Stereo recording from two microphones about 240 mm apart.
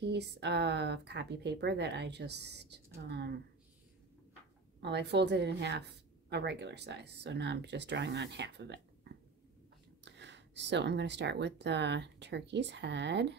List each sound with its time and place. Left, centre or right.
0.0 s speech: right
4.7 s speech: right